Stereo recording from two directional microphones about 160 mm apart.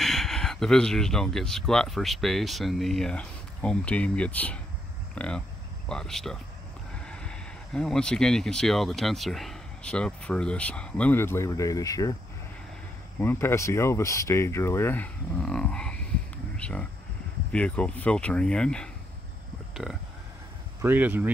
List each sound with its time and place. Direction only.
0.0 s speech: centre (ahead or behind); by 12.2 s 20° left (ahead or behind)
13.2 s speech: 15° left (ahead or behind); by 21.3 s 10° right (ahead or behind)